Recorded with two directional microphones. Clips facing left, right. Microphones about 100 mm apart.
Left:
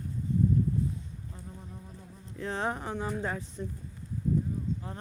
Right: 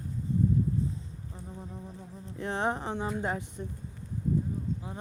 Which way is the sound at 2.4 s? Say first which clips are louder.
Right 2 dB; 20° right (ahead or behind).